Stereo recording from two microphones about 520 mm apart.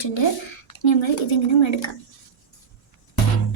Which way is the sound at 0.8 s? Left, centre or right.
Left.